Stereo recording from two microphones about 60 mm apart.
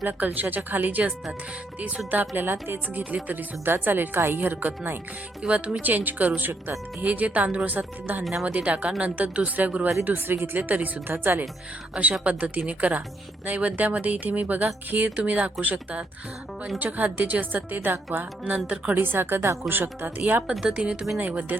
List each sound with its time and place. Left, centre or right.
0.0 s speech: right
5.4 s speech: centre
8.2 s speech: centre
8.4 s speech: right
10.6 s speech: right
18.9 s speech: right
20.5 s speech: centre; by 21.6 s right